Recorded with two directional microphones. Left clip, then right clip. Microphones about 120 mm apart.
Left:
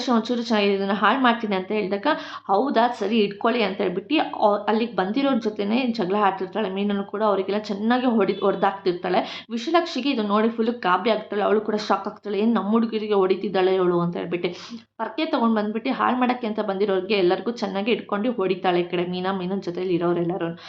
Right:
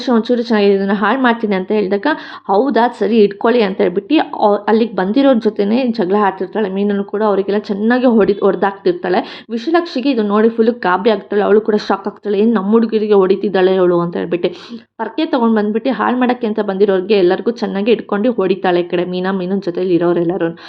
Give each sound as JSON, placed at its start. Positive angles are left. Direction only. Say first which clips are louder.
{"t": 0.0, "sound": "speech", "louder": "right 9 dB", "side_deg": -40}